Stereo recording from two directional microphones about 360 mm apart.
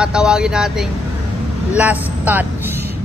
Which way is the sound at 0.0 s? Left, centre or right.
Centre.